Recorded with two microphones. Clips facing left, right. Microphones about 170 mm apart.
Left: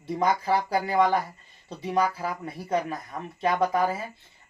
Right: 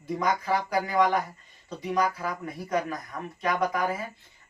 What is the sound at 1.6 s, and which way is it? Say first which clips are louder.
Speech: left 1 dB; 30° left (ahead or behind).